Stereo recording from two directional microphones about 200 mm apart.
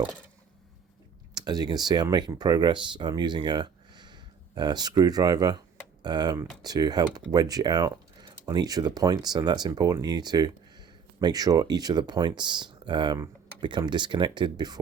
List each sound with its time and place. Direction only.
1.4 s speech: 20° right (ahead or behind)